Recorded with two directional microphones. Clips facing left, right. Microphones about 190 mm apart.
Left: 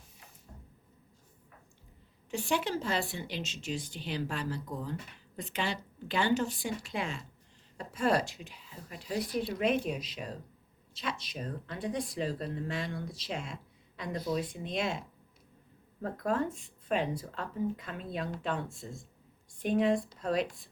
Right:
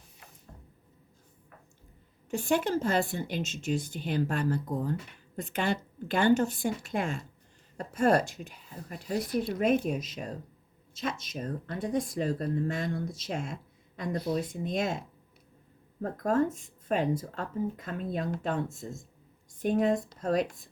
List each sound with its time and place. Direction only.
2.3 s speech: 45° right (ahead or behind)
14.3 s speech: 45° right (ahead or behind)
16.0 s speech: 45° right (ahead or behind)